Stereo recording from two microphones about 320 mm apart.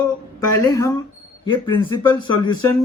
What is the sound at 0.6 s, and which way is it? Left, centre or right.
Speech, centre.